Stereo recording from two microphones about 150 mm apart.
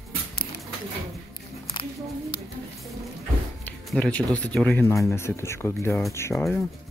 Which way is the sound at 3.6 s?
10° left (ahead or behind).